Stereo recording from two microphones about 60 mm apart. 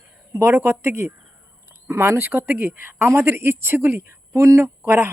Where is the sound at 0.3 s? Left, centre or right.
Right.